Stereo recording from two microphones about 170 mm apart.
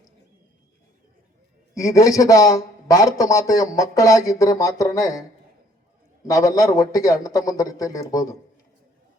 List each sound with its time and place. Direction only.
1.7 s a man's voice: 20° left (ahead or behind)
6.2 s a man's voice: 20° left (ahead or behind)